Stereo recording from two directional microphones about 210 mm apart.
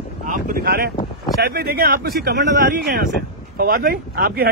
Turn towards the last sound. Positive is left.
turn(degrees=-45)  # may be behind; listen again after turning